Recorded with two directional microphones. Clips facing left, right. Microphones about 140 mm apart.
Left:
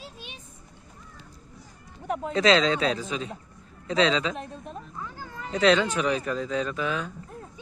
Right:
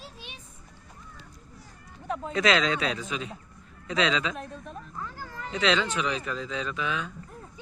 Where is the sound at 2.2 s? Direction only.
30° left (ahead or behind).